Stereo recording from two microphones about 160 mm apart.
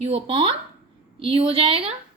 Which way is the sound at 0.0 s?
40° right (ahead or behind).